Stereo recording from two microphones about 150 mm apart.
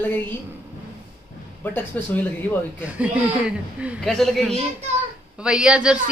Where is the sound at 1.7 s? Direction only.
15° left (ahead or behind).